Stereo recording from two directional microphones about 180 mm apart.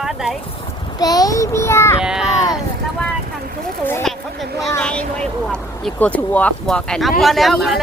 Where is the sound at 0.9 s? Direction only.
20° left (ahead or behind).